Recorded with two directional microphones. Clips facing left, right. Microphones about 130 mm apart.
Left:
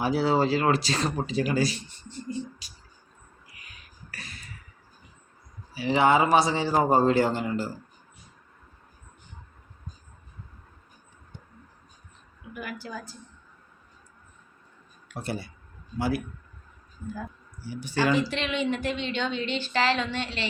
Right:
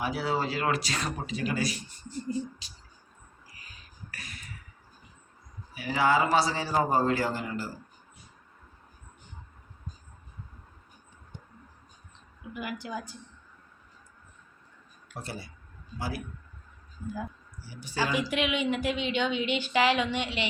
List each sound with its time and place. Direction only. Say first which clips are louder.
0.0 s a man's voice: left 6 dB; 30° left (ahead or behind)
2.6 s speech: even; 25° right (ahead or behind)
3.5 s a sound: left 1 dB; 35° right (ahead or behind)
4.1 s a sound: left 2 dB; 30° left (ahead or behind)
5.7 s a man's voice: left 4 dB; 25° left (ahead or behind)
12.8 s speech: right 1 dB; 20° right (ahead or behind)
15.1 s speech: left 6 dB; 60° left (ahead or behind)
17.7 s speech: left 5 dB; 60° left (ahead or behind)
18.1 s speech: left 2 dB; 10° right (ahead or behind)